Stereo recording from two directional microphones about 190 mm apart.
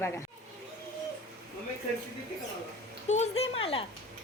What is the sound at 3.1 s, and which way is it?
Speech, 35° left (ahead or behind).